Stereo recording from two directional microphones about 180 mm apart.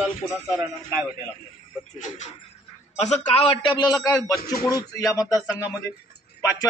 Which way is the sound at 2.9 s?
40° left (ahead or behind).